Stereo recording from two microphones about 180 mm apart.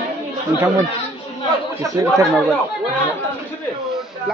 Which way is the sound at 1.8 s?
20° right (ahead or behind).